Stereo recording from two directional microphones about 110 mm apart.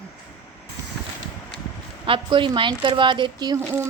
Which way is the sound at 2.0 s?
50° right (ahead or behind).